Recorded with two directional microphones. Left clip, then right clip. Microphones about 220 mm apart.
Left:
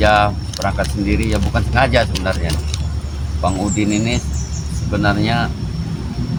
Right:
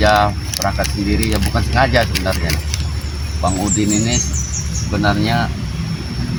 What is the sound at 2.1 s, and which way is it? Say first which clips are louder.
Speech: right 1 dB; centre (ahead or behind).